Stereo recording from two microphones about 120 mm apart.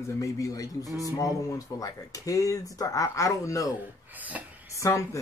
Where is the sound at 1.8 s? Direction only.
30° left (ahead or behind).